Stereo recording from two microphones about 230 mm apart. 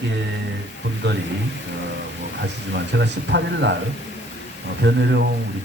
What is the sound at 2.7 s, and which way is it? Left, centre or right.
Speech, right.